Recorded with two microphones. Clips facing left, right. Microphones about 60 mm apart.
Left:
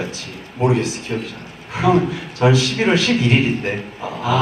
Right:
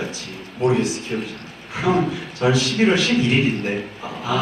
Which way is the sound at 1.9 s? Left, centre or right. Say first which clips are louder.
Left 3 dB; left.